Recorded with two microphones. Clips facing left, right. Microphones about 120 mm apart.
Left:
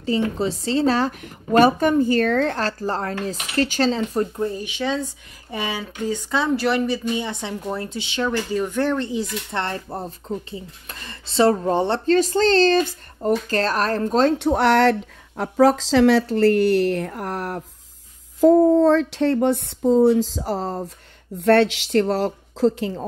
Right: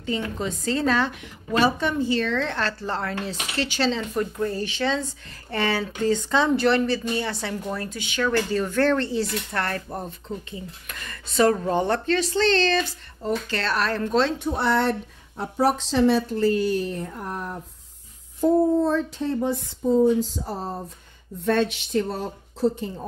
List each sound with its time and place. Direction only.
0.0 s a woman's voice: 30° left (ahead or behind)
4.4 s speech: 15° left (ahead or behind)
8.3 s speech: 15° left (ahead or behind)
10.0 s speech: 35° left (ahead or behind)
12.2 s a woman's voice: 40° left (ahead or behind)
14.4 s speech: 90° left
18.4 s speech: 90° left